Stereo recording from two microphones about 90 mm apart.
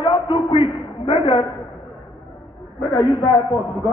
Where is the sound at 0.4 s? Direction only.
60° left (ahead or behind).